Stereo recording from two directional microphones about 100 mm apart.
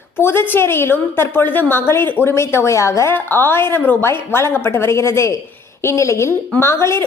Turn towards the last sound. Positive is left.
turn(degrees=25)  # may be behind; listen again after turning